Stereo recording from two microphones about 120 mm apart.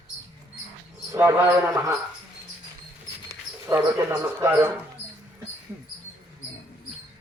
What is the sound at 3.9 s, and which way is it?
Speech, 25° right (ahead or behind).